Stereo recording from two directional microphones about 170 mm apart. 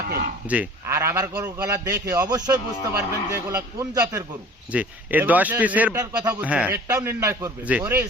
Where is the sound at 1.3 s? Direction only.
10° right (ahead or behind).